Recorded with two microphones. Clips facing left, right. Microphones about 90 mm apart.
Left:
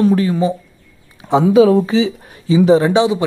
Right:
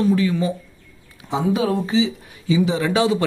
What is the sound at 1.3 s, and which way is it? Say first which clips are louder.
Speech: left 10 dB; 70° left (ahead or behind).